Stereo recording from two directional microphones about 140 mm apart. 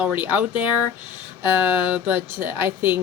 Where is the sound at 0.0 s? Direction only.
10° right (ahead or behind).